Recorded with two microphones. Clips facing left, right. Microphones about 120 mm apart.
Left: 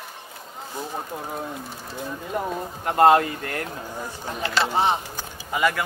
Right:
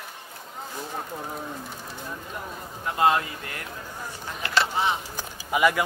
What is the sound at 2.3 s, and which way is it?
Speech, 55° left (ahead or behind).